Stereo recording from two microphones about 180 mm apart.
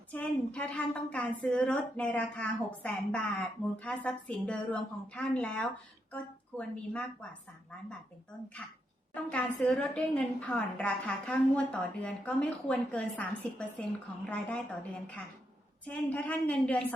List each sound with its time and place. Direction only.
0.1 s a woman's voice: 5° left (ahead or behind)
8.6 s a woman's voice: 5° left (ahead or behind)
15.9 s a woman's voice: 10° left (ahead or behind)